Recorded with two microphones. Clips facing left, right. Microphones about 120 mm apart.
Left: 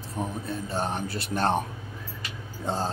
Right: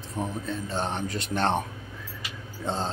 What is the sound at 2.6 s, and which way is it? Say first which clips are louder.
Speech: left 1 dB; 10° left (ahead or behind).